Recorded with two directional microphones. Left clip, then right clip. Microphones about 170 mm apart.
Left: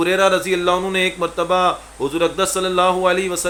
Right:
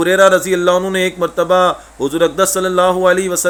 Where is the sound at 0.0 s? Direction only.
40° right (ahead or behind).